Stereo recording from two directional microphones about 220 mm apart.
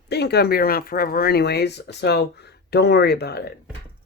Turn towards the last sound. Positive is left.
turn(degrees=50)  # may be behind; listen again after turning